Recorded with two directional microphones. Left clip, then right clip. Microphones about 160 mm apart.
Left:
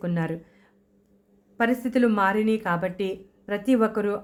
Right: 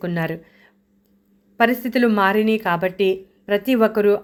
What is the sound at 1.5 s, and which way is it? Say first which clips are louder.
A woman's voice: right 6 dB; 15° right (ahead or behind).